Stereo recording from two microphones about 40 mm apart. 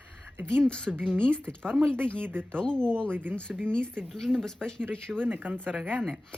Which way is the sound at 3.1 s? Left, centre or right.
Right.